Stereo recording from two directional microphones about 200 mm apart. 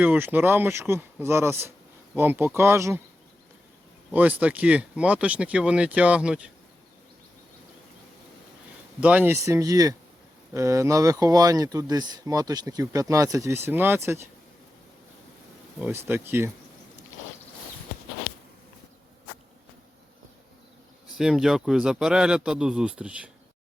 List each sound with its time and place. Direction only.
0.0 s speech: 10° right (ahead or behind)
4.1 s speech: 5° right (ahead or behind)
9.0 s speech: 10° right (ahead or behind)
15.8 s speech: 10° right (ahead or behind)
21.1 s a man's voice: 5° right (ahead or behind)